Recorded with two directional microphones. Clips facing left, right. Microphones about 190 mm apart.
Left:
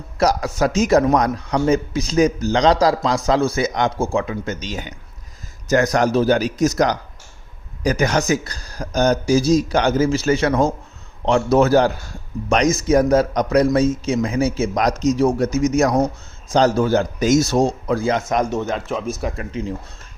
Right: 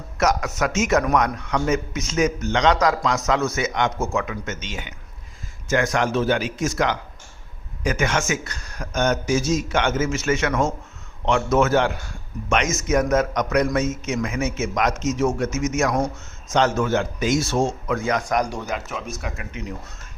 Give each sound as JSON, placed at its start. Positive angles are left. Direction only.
{"t": 0.2, "sound": "a man's voice", "side_deg": 35}